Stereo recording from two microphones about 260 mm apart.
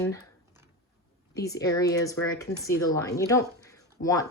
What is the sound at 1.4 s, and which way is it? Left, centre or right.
Speech, centre.